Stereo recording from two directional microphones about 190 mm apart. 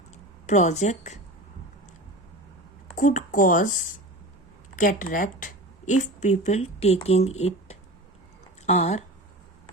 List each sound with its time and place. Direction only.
0.4 s a woman's voice: 40° left (ahead or behind)
2.9 s speech: 45° left (ahead or behind)
4.8 s speech: 45° left (ahead or behind)